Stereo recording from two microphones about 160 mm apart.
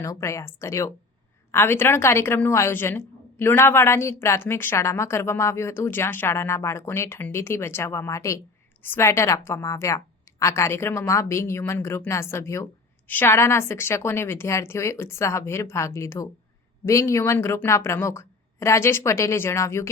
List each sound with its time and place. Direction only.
0.0 s a woman's voice: 20° left (ahead or behind)